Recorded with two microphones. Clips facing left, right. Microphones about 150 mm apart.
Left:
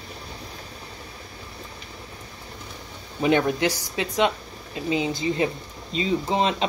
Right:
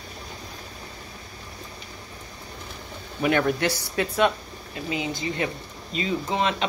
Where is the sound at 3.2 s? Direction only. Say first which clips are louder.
Left 2 dB; 20° left (ahead or behind).